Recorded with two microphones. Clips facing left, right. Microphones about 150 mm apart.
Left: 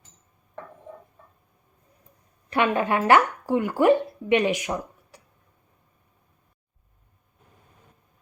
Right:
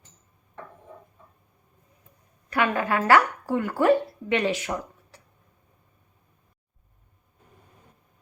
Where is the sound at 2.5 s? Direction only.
20° left (ahead or behind).